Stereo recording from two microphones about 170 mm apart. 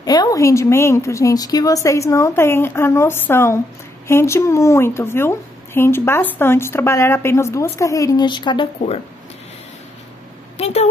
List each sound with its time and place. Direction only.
0.0 s a woman's voice: 20° left (ahead or behind)
10.6 s a woman's voice: 40° left (ahead or behind)